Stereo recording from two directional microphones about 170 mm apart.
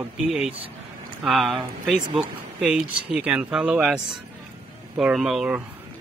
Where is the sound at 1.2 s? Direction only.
Centre (ahead or behind).